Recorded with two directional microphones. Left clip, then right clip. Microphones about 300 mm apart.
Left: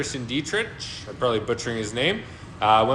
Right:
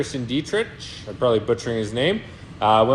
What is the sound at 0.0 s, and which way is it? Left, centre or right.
Speech, right.